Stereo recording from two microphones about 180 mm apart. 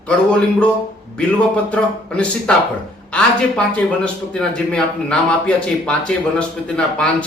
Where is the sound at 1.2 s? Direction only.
5° left (ahead or behind).